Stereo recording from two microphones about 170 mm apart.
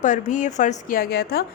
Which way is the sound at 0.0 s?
50° left (ahead or behind).